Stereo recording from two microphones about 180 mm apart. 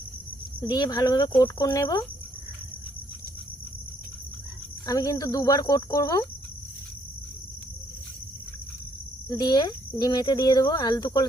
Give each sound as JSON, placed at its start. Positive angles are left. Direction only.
{"t": 0.6, "sound": "speech", "side_deg": 20}
{"t": 4.9, "sound": "speech", "side_deg": 20}
{"t": 9.3, "sound": "speech", "side_deg": 25}